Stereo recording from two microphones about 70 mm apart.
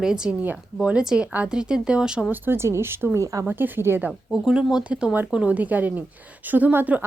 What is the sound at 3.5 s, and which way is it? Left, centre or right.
Speech, right.